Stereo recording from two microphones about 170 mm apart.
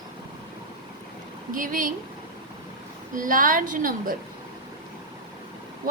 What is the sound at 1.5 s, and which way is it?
Speech, 55° right (ahead or behind).